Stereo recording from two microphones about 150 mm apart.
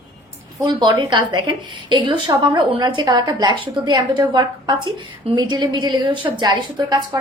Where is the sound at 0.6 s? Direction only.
30° right (ahead or behind).